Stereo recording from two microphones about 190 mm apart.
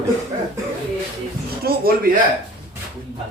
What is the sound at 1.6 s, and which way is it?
Speech, 50° right (ahead or behind).